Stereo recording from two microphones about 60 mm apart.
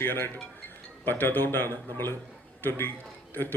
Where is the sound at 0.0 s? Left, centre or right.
Left.